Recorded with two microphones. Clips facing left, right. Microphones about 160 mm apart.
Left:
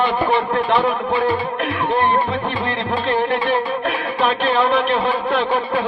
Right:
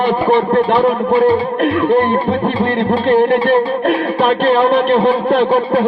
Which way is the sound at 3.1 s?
50° right (ahead or behind).